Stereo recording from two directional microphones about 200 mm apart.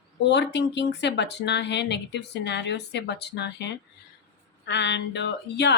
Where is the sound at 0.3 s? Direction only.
60° left (ahead or behind).